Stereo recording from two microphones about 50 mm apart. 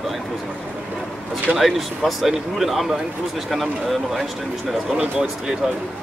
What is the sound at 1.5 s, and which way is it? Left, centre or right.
Speech, centre.